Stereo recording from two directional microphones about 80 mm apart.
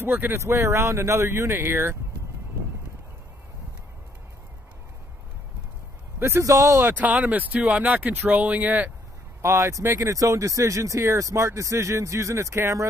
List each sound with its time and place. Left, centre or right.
0.0 s speech: right
0.3 s speech: right
6.1 s a man's voice: right
6.4 s speech: right
6.8 s speech: centre
9.4 s speech: right